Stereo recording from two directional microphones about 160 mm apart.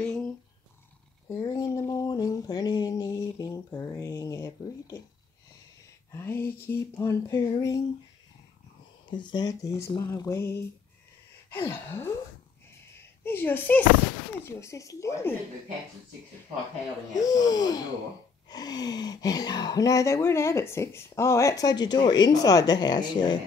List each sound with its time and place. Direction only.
0.0 s a sound: 5° left (ahead or behind)
1.3 s speech: 20° left (ahead or behind)
6.1 s speech: 15° left (ahead or behind)
9.1 s speech: 30° left (ahead or behind)
13.2 s speech: 15° left (ahead or behind)
17.1 s speech: 20° left (ahead or behind)